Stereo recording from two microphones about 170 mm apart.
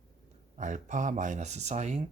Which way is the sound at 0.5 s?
45° right (ahead or behind).